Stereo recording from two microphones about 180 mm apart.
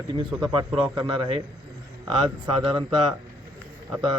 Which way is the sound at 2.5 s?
30° right (ahead or behind).